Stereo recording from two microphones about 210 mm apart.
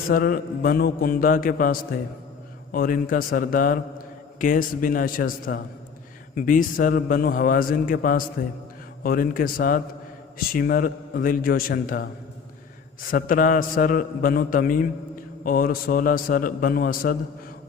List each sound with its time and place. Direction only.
0.1 s a man's voice: 45° left (ahead or behind)
13.1 s a man's voice: 40° left (ahead or behind)